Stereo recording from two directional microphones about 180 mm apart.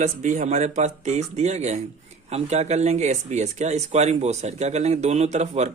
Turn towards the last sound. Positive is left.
turn(degrees=-35)  # may be behind; listen again after turning